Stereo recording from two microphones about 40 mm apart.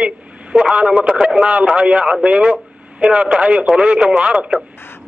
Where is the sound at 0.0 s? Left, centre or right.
Right.